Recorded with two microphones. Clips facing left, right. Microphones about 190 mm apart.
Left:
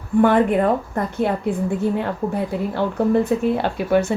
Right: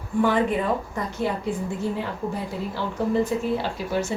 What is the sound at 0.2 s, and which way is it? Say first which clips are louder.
Speech: left 6 dB; 55° left (ahead or behind).